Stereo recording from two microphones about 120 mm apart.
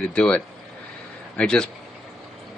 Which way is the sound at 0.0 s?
10° left (ahead or behind).